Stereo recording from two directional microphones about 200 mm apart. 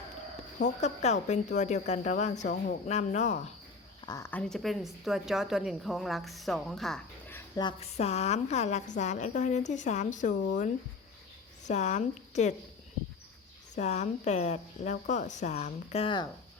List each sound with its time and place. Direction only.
0.8 s speech: 35° left (ahead or behind)
4.0 s speech: 15° left (ahead or behind); by 10.3 s 40° left (ahead or behind)
11.7 s speech: 35° left (ahead or behind)
13.7 s speech: 35° left (ahead or behind)